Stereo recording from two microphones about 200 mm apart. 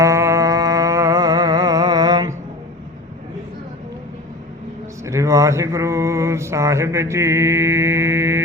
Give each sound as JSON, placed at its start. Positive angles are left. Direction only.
{"t": 0.0, "sound": "music", "side_deg": -15}
{"t": 5.0, "sound": "mantra", "side_deg": -15}